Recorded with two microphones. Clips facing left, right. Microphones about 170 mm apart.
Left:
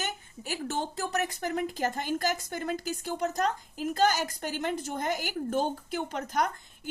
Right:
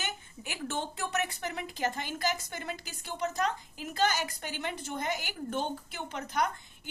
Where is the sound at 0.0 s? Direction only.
40° left (ahead or behind).